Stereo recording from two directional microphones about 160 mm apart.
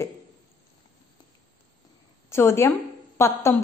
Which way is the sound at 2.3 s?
15° left (ahead or behind).